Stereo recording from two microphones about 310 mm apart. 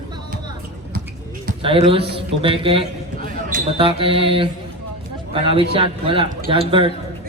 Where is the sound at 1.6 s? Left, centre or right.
Centre.